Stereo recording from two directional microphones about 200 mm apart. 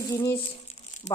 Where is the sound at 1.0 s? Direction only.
35° left (ahead or behind).